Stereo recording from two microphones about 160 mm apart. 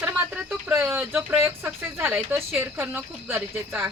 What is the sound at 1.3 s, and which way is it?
Speech, 15° right (ahead or behind).